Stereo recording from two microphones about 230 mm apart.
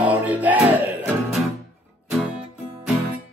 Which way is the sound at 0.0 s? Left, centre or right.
Centre.